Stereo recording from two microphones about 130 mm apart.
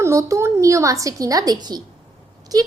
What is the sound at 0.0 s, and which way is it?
A woman's voice, 25° right (ahead or behind).